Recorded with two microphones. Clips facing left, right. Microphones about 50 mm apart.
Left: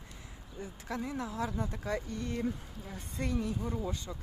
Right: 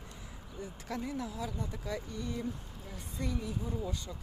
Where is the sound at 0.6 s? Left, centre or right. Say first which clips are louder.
Left 1 dB; left.